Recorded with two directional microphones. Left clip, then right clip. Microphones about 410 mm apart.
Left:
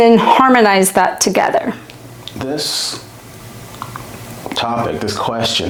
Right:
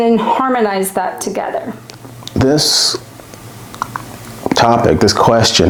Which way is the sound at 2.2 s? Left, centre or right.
Right.